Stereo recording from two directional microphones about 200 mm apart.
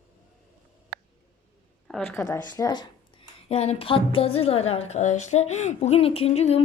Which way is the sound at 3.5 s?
30° left (ahead or behind).